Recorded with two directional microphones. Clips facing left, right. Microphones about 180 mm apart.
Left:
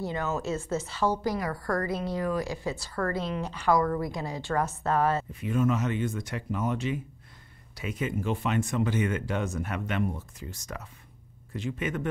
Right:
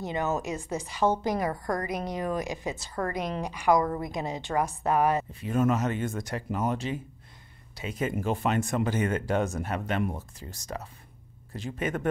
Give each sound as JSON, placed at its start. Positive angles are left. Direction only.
{"t": 0.0, "sound": "a woman's voice", "side_deg": -20}
{"t": 5.3, "sound": "speech", "side_deg": -40}
{"t": 8.0, "sound": "speech", "side_deg": -45}